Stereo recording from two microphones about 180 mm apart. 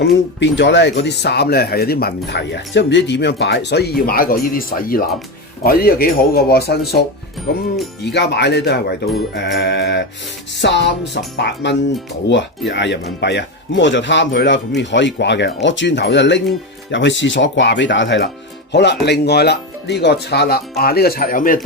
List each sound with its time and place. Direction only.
0.0 s speech: 80° left; by 7.0 s 60° left (ahead or behind)
8.0 s speech: 70° left (ahead or behind); by 18.3 s 90° left
18.7 s speech: 70° left (ahead or behind); by 21.6 s 50° left (ahead or behind)